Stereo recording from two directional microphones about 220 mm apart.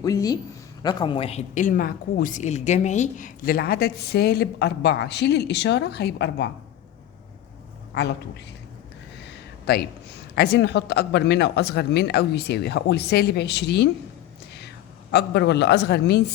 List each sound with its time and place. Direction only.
0.0 s a woman's voice: 15° left (ahead or behind); by 6.5 s 50° left (ahead or behind)
9.7 s a woman's voice: 50° left (ahead or behind)
15.1 s a woman's voice: 50° left (ahead or behind)